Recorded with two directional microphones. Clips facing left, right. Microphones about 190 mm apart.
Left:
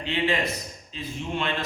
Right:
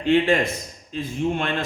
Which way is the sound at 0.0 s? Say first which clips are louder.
Right 7 dB; 50° right (ahead or behind).